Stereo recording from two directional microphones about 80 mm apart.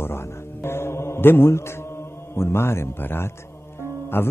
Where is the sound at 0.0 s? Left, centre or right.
Left.